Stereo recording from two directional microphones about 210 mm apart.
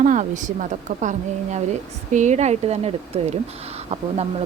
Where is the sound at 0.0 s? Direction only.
35° right (ahead or behind).